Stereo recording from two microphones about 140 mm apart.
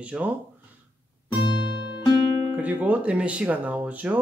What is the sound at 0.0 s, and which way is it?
Speech, 10° right (ahead or behind).